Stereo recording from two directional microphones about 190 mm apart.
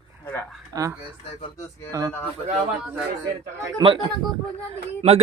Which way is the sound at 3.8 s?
30° right (ahead or behind).